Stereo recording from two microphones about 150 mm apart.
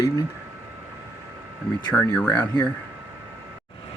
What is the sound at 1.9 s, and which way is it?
Speech, 5° left (ahead or behind).